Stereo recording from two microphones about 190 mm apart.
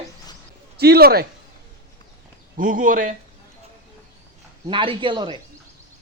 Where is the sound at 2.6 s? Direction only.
45° right (ahead or behind).